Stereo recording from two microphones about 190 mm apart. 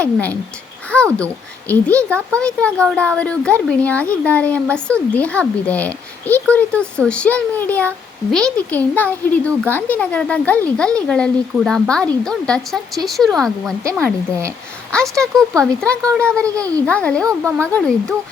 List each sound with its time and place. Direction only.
0.0 s speech: 10° left (ahead or behind)
13.8 s speech: 15° right (ahead or behind)
14.9 s speech: 5° left (ahead or behind)
16.6 s speech: 15° right (ahead or behind)
16.8 s speech: 5° left (ahead or behind)
17.2 s speech: 15° right (ahead or behind)
17.7 s speech: 5° left (ahead or behind)